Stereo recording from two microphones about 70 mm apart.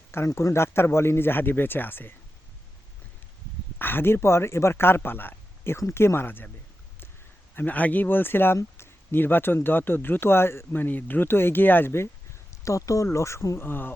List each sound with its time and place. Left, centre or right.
0.3 s speech: left
3.8 s speech: left
7.5 s speech: left
12.6 s speech: left
13.6 s speech: left